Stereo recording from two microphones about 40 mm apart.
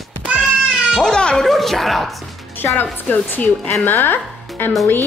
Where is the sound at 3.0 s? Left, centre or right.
Left.